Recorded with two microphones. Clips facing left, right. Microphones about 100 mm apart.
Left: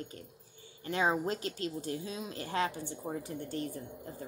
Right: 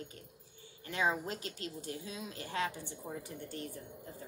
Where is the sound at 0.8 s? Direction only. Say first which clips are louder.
Left 4 dB; 30° left (ahead or behind).